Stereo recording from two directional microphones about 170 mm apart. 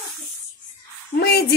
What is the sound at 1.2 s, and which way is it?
Speech, 70° left (ahead or behind).